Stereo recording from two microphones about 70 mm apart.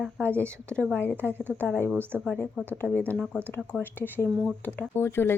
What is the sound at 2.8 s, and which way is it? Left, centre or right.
Speech, right.